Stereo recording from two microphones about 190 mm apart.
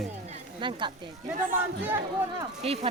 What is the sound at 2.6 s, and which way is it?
Speech, 30° right (ahead or behind).